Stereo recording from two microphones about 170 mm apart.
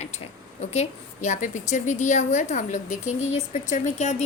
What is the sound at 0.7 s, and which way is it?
A woman's voice, 45° left (ahead or behind).